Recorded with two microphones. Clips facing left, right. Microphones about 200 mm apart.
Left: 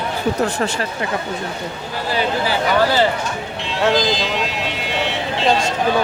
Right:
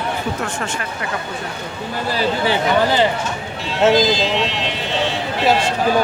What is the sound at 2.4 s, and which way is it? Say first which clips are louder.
Speech: right 1 dB; 20° right (ahead or behind).